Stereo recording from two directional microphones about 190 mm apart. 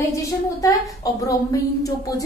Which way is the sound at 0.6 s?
20° left (ahead or behind).